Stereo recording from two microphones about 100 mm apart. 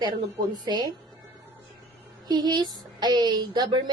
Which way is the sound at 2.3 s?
50° right (ahead or behind).